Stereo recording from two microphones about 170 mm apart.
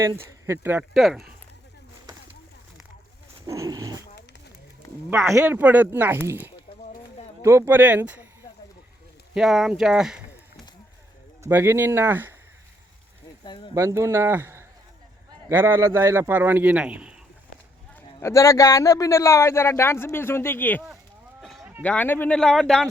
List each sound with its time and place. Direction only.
0.4 s a man's voice: 15° right (ahead or behind)
0.9 s speech: centre (ahead or behind)
3.4 s dog: 20° right (ahead or behind)
5.3 s a man's voice: 15° right (ahead or behind)
9.3 s speech: centre (ahead or behind)
11.4 s a man's voice: 15° right (ahead or behind)
13.4 s speech: 25° left (ahead or behind)
13.7 s a man's voice: 15° right (ahead or behind)
18.2 s speech: 15° left (ahead or behind)
21.4 s a sound: centre (ahead or behind)
21.8 s speech: 10° left (ahead or behind)